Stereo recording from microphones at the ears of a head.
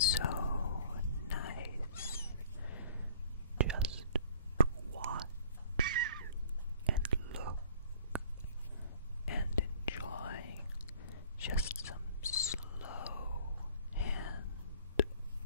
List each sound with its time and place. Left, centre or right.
0.0 s whispering: left
3.5 s whispering: right
5.8 s honk: right
6.9 s whispering: right
8.8 s whispering: left
13.9 s a sound: left